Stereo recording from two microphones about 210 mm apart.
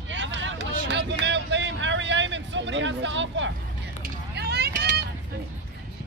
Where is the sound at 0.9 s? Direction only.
55° right (ahead or behind).